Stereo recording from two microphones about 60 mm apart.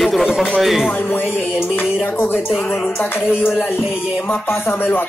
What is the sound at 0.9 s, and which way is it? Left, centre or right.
Speech, left.